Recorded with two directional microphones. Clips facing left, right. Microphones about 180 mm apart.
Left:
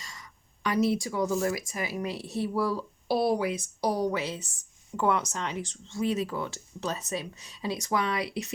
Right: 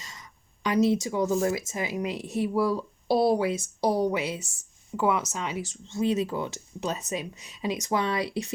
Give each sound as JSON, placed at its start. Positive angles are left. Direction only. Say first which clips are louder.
{"t": 0.0, "sound": "speech", "louder": "even", "side_deg": -20}
{"t": 5.9, "sound": "speech", "louder": "right 3 dB", "side_deg": -25}